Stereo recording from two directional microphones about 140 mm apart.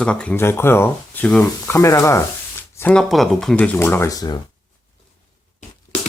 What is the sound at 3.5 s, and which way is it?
Speech, 10° left (ahead or behind).